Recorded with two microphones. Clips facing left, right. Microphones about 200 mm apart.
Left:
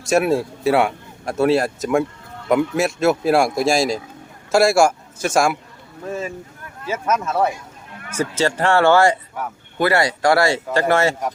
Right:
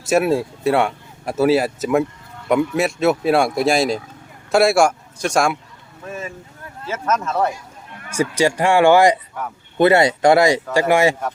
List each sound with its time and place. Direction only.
0.0 s speech: centre (ahead or behind)
6.8 s speech: 10° left (ahead or behind)
8.1 s speech: 10° right (ahead or behind)